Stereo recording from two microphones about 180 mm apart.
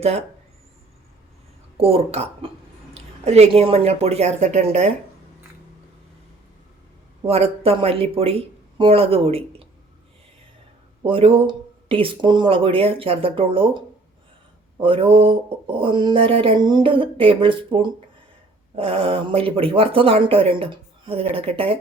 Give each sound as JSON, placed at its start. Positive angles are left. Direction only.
{"t": 0.0, "sound": "speech", "side_deg": -35}
{"t": 1.8, "sound": "speech", "side_deg": -35}
{"t": 7.3, "sound": "speech", "side_deg": -35}
{"t": 11.0, "sound": "a sound", "side_deg": -30}
{"t": 14.8, "sound": "a sound", "side_deg": -30}
{"t": 18.8, "sound": "speech", "side_deg": -30}